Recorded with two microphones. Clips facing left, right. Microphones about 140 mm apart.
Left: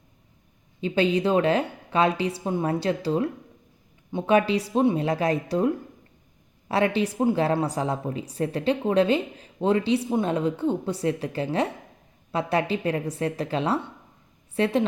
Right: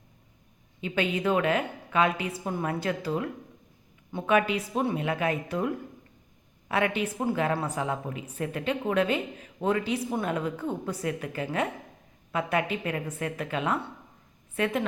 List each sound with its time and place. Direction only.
0.8 s a woman's voice: 30° left (ahead or behind)